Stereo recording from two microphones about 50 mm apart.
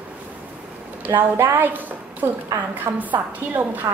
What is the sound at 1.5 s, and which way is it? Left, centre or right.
A woman's voice, right.